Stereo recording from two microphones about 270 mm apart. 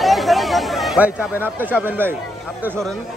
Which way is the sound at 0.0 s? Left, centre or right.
Centre.